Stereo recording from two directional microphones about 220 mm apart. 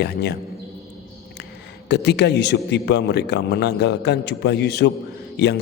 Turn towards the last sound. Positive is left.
turn(degrees=50)  # may be behind; listen again after turning